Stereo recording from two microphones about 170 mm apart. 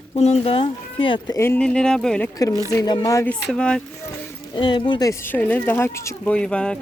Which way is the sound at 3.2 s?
5° left (ahead or behind).